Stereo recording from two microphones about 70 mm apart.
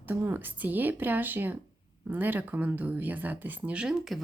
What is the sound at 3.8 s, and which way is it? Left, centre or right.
Speech, centre.